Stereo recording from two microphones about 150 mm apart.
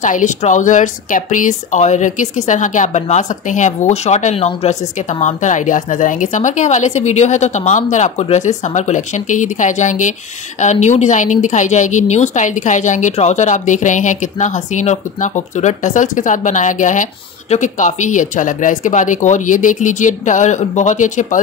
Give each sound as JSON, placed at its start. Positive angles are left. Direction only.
{"t": 0.0, "sound": "a woman's voice", "side_deg": 55}